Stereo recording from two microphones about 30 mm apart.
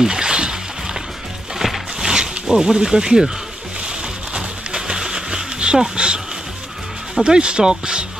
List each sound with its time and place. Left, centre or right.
0.0 s splash: right
1.6 s music: centre
2.0 s zipper: right
3.8 s music: right
4.4 s a sound: right
5.9 s speech: right
7.2 s speech: right